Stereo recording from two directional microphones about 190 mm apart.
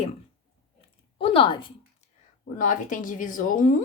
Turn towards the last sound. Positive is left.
turn(degrees=45)  # may be behind; listen again after turning